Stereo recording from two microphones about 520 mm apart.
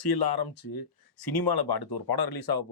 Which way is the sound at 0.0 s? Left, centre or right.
Left.